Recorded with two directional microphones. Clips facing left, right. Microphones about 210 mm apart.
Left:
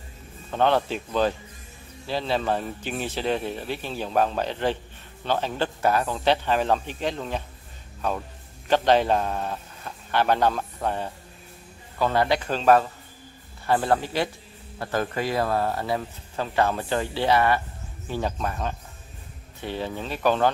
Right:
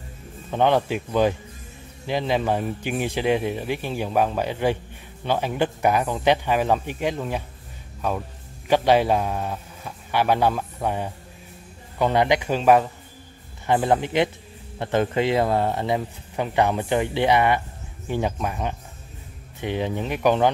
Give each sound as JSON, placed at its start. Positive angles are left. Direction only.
{"t": 0.5, "sound": "speech", "side_deg": -15}
{"t": 8.6, "sound": "speech", "side_deg": -10}